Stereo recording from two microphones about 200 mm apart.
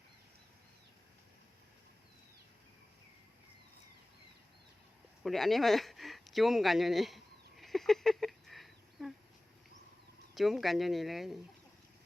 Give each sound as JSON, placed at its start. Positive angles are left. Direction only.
{"t": 5.2, "sound": "speech", "side_deg": 0}
{"t": 7.6, "sound": "a sound", "side_deg": 0}
{"t": 10.3, "sound": "speech", "side_deg": 0}